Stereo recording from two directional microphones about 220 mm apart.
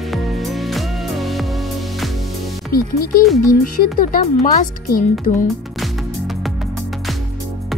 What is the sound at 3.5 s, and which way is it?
Speech, 40° left (ahead or behind).